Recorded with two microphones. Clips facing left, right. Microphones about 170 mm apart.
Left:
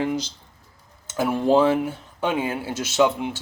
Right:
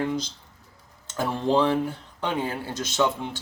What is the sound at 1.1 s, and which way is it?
Speech, 10° left (ahead or behind).